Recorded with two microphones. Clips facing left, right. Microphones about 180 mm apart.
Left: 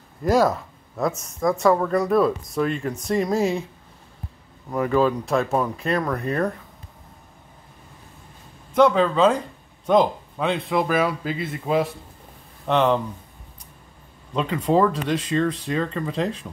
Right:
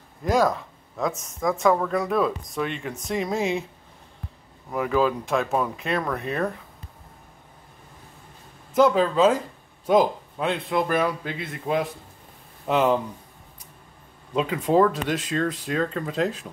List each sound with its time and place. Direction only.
0.2 s speech: 5° left (ahead or behind)
4.6 s speech: centre (ahead or behind)
8.7 s speech: 5° right (ahead or behind)
14.3 s speech: 5° right (ahead or behind)